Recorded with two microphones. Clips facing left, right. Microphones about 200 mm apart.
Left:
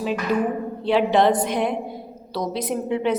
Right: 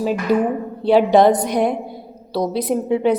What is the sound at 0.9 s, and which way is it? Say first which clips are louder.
A woman's voice: right 5 dB; 40° right (ahead or behind).